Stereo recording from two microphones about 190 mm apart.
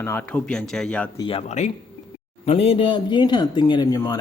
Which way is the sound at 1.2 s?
30° left (ahead or behind).